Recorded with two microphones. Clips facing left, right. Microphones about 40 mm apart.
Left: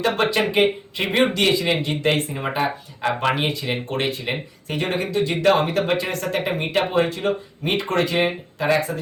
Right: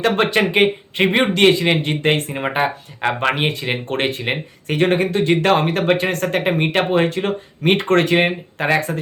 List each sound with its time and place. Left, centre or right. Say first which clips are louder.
0.0 s a man's voice: right 3 dB; right